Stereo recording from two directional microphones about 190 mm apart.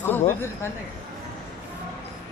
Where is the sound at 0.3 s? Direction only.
15° left (ahead or behind).